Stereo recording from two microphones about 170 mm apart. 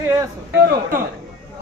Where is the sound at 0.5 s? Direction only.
55° right (ahead or behind).